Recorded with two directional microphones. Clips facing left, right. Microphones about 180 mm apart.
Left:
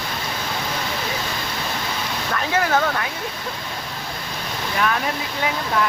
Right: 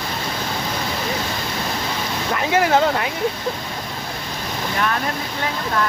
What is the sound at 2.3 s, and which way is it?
Speech, 25° right (ahead or behind).